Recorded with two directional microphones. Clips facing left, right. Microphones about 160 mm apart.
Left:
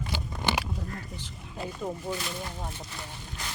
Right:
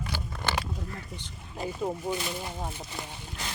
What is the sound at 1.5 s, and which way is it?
Speech, 15° right (ahead or behind).